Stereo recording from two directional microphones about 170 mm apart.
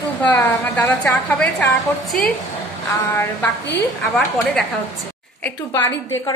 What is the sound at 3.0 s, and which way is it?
A woman's voice, 15° left (ahead or behind).